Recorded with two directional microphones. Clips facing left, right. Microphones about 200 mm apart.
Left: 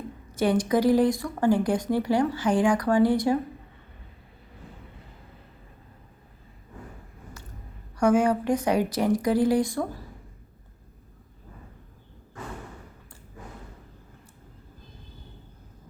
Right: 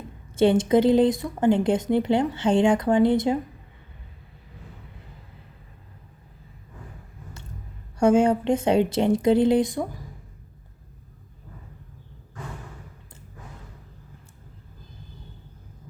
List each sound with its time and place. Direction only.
0.3 s speech: 25° right (ahead or behind)
7.9 s speech: 25° right (ahead or behind)